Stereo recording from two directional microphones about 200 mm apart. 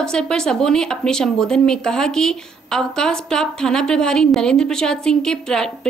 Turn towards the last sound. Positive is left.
turn(degrees=5)  # may be behind; listen again after turning